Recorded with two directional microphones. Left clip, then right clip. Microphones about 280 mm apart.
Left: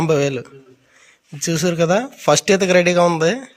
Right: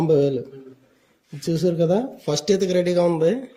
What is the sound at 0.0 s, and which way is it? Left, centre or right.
Speech, centre.